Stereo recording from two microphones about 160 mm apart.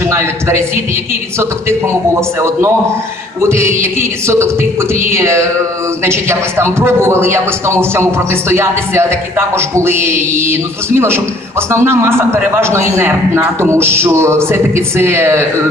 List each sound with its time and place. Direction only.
0.1 s a man's voice: 15° right (ahead or behind)